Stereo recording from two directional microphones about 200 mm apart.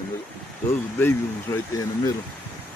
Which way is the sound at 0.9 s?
10° left (ahead or behind).